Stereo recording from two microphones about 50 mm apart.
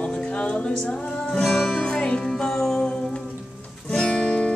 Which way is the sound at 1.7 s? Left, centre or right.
Centre.